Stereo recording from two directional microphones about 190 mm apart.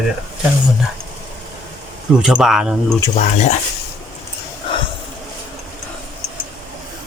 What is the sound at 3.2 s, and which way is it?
Speech, 40° left (ahead or behind).